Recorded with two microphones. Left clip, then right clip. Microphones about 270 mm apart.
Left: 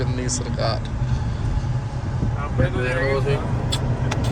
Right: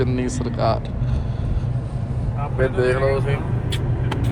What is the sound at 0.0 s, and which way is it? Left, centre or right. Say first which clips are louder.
Vehicle: right 3 dB; right.